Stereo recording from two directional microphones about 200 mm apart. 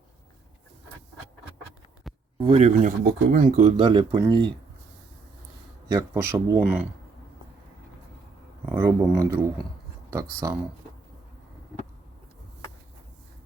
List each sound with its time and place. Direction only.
2.0 s a sound: centre (ahead or behind)
2.5 s speech: 35° right (ahead or behind)
3.0 s speech: 55° right (ahead or behind)
3.4 s speech: 35° right (ahead or behind)
3.8 s speech: 25° right (ahead or behind)
5.9 s speech: 15° right (ahead or behind)
8.7 s speech: 15° right (ahead or behind)